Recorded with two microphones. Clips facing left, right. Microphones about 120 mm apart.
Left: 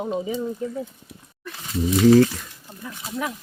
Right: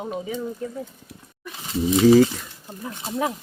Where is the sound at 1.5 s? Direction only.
20° right (ahead or behind).